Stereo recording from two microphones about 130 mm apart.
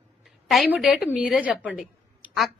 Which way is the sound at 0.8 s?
5° right (ahead or behind).